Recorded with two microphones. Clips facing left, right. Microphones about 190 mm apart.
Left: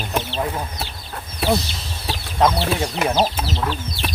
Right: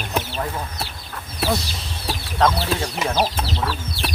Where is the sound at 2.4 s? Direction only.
15° left (ahead or behind).